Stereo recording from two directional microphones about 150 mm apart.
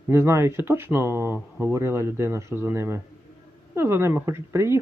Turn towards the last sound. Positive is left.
turn(degrees=-15)  # may be behind; listen again after turning